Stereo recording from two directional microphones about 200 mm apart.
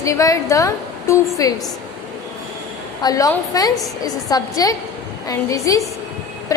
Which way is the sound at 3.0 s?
15° left (ahead or behind).